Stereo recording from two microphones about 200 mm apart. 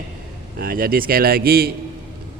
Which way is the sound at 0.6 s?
45° right (ahead or behind).